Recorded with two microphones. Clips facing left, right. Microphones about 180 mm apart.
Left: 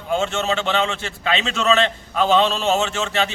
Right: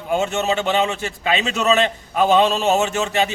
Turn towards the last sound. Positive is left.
turn(degrees=-15)  # may be behind; listen again after turning